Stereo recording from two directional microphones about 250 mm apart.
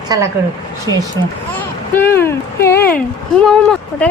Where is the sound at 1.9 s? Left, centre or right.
Centre.